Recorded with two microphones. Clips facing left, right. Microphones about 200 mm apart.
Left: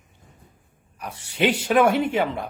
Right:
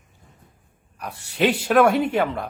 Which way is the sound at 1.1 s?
70° right (ahead or behind).